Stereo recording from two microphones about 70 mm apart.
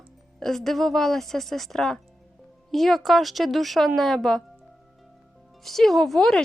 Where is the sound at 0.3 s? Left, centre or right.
Centre.